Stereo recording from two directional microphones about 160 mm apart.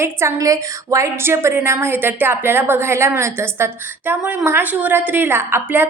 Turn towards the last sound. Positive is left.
turn(degrees=-15)  # may be behind; listen again after turning